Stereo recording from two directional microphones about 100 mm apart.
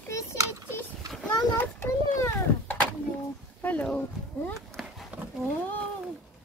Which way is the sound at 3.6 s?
15° left (ahead or behind).